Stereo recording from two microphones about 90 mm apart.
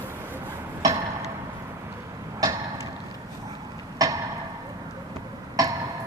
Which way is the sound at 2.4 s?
45° right (ahead or behind).